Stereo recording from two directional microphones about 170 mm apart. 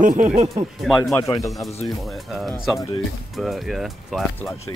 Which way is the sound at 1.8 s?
Centre (ahead or behind).